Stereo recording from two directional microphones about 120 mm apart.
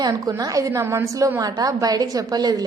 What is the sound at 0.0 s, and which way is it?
A woman's voice, 30° right (ahead or behind).